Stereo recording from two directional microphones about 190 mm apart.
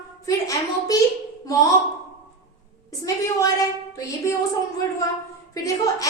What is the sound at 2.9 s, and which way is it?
Speech, 15° left (ahead or behind).